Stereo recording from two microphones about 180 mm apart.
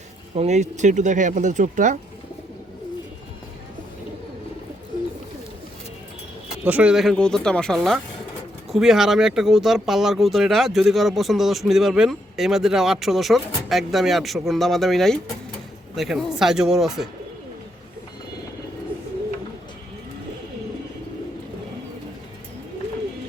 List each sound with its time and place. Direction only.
0.3 s speech: 40° right (ahead or behind)
6.7 s speech: 5° right (ahead or behind)